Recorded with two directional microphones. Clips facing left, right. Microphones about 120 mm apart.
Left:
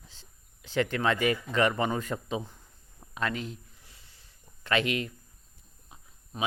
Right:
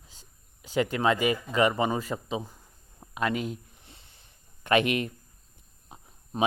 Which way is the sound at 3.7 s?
25° right (ahead or behind).